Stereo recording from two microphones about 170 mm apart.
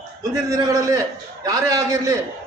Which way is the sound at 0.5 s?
20° right (ahead or behind).